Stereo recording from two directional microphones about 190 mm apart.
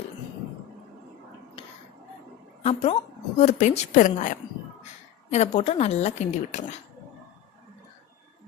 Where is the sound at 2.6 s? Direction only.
30° left (ahead or behind).